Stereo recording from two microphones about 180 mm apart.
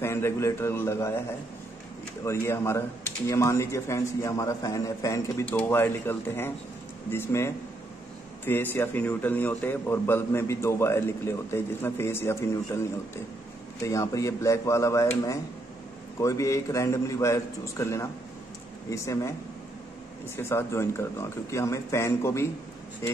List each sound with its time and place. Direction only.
0.0 s a man's voice: 15° left (ahead or behind)
2.2 s a man's voice: 15° left (ahead or behind)
13.8 s a man's voice: 15° left (ahead or behind)
20.3 s a man's voice: 15° left (ahead or behind)